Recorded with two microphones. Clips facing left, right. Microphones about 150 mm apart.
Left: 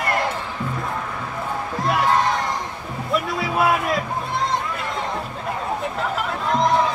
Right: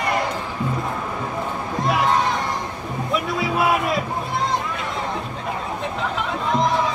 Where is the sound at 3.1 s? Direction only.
Centre (ahead or behind).